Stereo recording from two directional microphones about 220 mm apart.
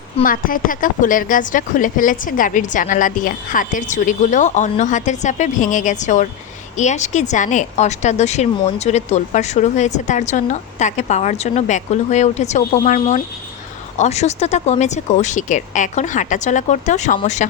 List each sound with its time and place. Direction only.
0.2 s a woman's voice: 40° left (ahead or behind)